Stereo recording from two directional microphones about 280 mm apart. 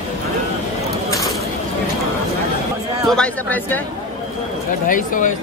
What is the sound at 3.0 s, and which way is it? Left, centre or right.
Speech, centre.